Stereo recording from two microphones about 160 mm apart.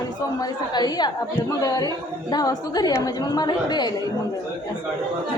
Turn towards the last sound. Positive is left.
turn(degrees=25)  # may be behind; listen again after turning